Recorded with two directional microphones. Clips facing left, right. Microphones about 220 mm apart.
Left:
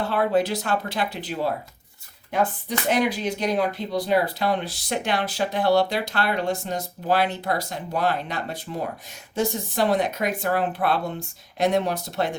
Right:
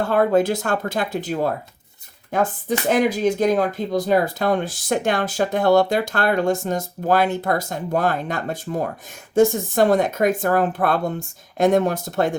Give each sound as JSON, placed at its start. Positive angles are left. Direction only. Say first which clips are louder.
{"t": 0.0, "sound": "speech", "louder": "right 4 dB", "side_deg": -50}